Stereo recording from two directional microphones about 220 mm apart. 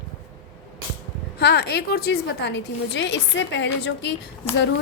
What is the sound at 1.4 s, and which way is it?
A woman's voice, 50° left (ahead or behind).